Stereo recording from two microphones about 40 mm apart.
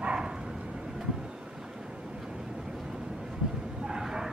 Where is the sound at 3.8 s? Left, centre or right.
Centre.